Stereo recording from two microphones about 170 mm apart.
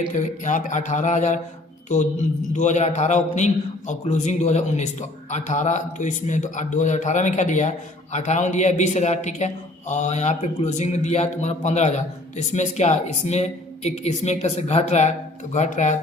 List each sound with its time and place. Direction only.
0.1 s a man's voice: 45° left (ahead or behind)
2.5 s a man's voice: 45° left (ahead or behind)